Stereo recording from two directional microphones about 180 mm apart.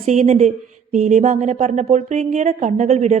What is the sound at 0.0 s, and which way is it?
Speech, 40° right (ahead or behind).